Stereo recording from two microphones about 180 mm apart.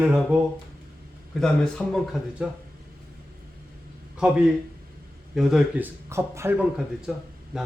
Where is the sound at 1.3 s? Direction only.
5° left (ahead or behind).